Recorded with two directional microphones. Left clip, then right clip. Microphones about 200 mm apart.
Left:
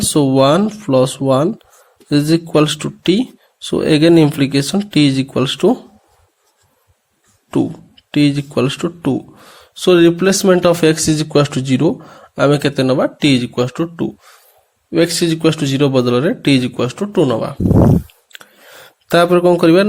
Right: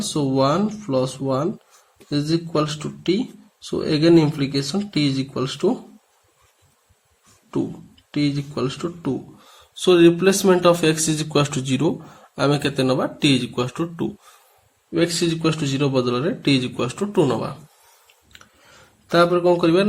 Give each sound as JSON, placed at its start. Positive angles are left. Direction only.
{"t": 0.1, "sound": "speech", "side_deg": 40}
{"t": 7.5, "sound": "speech", "side_deg": 40}
{"t": 19.0, "sound": "speech", "side_deg": 40}